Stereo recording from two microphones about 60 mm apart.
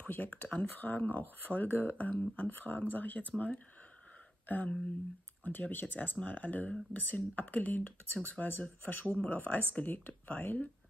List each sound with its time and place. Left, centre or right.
0.1 s speech: left